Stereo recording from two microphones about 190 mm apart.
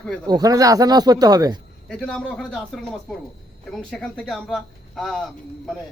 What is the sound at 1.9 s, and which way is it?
Speech, 5° left (ahead or behind).